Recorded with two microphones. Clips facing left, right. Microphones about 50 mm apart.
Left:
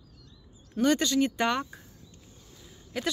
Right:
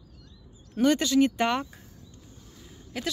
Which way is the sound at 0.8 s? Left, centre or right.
Centre.